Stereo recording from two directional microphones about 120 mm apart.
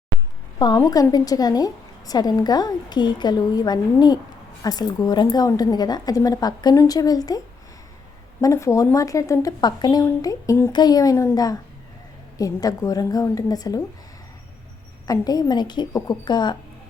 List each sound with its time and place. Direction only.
0.6 s a woman's voice: 35° left (ahead or behind)
10.7 s a woman's voice: 35° left (ahead or behind)
15.0 s a woman's voice: 30° left (ahead or behind)